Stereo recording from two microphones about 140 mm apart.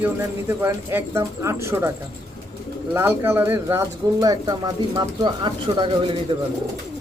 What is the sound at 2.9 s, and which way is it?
Speech, 15° right (ahead or behind).